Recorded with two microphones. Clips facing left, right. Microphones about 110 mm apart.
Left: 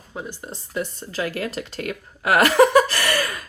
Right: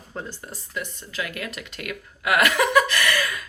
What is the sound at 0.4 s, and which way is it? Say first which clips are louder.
Speech: left 5 dB; 30° left (ahead or behind).